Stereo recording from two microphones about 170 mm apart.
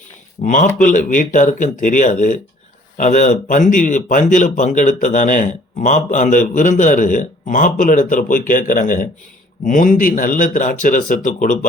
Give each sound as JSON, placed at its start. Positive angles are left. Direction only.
{"t": 0.4, "sound": "speech", "side_deg": 45}